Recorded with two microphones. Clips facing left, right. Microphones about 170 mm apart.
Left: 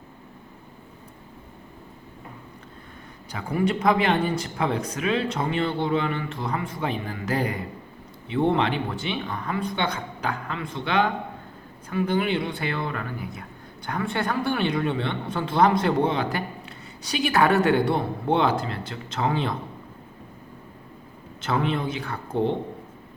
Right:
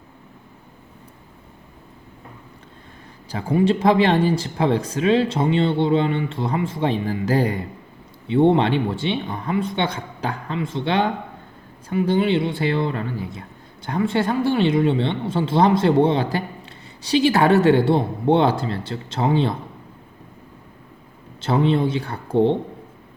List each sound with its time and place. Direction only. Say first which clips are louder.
3.3 s speech: right 6 dB; 30° right (ahead or behind)
21.4 s speech: right 6 dB; 30° right (ahead or behind)